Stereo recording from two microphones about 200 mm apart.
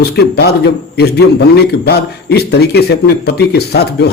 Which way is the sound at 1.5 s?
55° left (ahead or behind).